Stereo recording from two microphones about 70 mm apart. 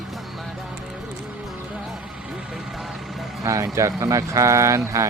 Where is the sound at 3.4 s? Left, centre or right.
Right.